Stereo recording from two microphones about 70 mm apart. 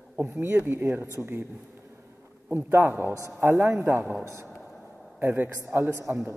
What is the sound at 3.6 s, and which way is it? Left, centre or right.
Speech, centre.